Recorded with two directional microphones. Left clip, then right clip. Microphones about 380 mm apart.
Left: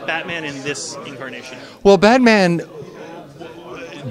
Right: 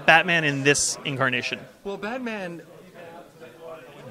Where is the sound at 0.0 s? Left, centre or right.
Right.